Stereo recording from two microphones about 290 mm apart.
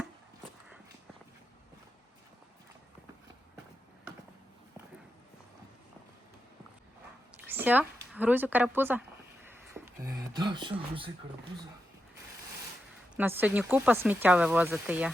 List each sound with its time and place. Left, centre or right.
7.3 s speech: centre
9.7 s a sound: centre
13.1 s speech: centre